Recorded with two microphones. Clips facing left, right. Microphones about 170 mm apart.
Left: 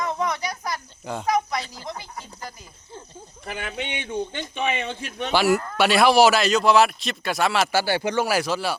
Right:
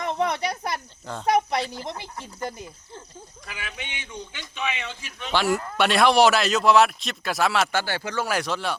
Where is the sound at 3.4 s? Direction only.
55° left (ahead or behind).